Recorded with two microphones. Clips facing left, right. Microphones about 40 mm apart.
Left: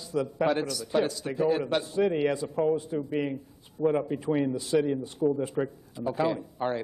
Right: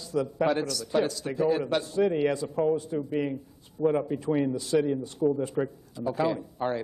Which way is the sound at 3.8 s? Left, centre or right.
Centre.